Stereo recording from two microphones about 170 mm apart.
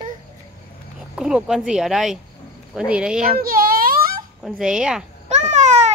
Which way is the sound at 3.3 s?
60° right (ahead or behind).